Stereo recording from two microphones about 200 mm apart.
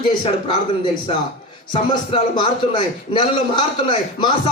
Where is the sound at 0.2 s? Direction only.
25° left (ahead or behind).